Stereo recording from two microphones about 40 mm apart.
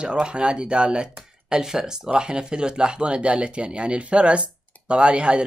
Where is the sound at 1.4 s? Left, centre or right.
Centre.